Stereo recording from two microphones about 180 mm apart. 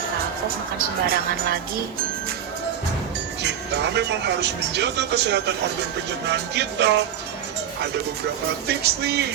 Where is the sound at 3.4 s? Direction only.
70° right (ahead or behind).